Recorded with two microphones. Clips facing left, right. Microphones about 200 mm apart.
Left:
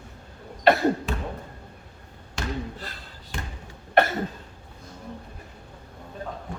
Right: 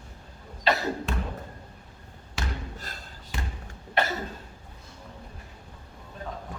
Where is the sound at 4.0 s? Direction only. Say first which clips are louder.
Left 7 dB; 55° left (ahead or behind).